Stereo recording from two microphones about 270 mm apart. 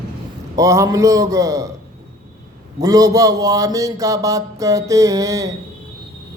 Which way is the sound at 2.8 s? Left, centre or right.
Centre.